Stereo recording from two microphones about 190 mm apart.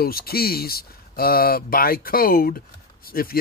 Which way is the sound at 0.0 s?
55° left (ahead or behind).